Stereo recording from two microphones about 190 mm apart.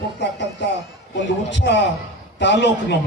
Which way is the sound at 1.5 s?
65° left (ahead or behind).